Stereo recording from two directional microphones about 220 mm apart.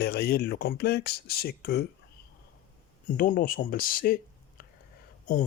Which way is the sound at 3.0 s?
35° left (ahead or behind).